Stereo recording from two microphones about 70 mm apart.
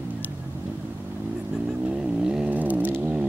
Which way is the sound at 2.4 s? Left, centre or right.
Right.